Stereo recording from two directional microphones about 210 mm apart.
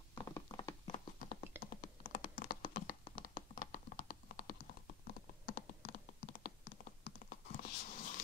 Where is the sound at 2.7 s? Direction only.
45° left (ahead or behind).